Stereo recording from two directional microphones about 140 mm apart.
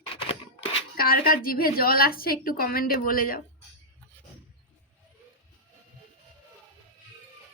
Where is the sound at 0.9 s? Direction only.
90° left.